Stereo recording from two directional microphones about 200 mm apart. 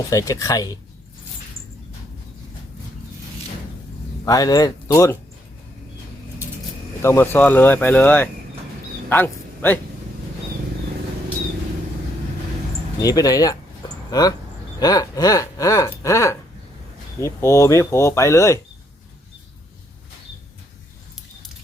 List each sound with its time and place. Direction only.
0.1 s speech: 15° left (ahead or behind)
4.3 s speech: 20° left (ahead or behind)
7.0 s speech: 10° left (ahead or behind)
13.0 s speech: 15° left (ahead or behind)